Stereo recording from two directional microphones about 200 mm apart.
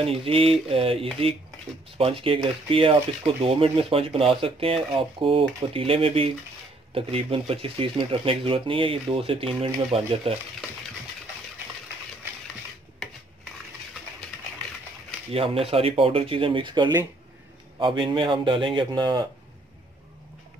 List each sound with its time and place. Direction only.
0.0 s speech: 30° right (ahead or behind)
14.2 s bird: centre (ahead or behind)
15.3 s speech: 30° right (ahead or behind)